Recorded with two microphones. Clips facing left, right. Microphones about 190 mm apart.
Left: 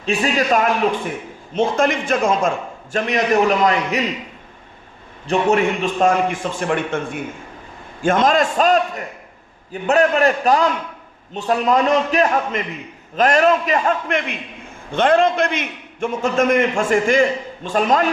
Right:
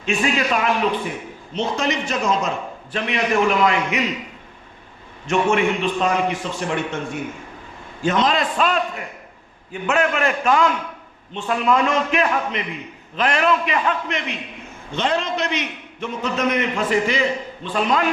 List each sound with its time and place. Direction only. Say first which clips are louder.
0.0 s a man's voice: left 2 dB; 35° left (ahead or behind)
5.2 s a man's voice: left 2 dB; 35° left (ahead or behind)